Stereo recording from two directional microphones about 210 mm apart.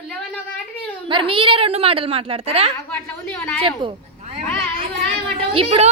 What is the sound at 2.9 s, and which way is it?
Speech, 10° left (ahead or behind).